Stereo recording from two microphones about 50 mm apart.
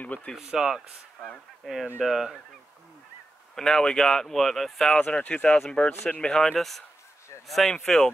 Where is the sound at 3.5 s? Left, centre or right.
Centre.